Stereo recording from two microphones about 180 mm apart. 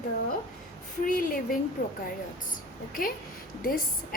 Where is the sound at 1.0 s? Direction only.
50° left (ahead or behind).